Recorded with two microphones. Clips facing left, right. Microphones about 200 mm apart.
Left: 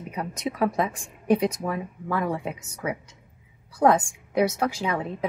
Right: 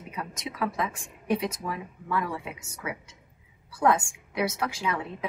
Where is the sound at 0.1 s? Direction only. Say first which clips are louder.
Left 6 dB; 40° left (ahead or behind).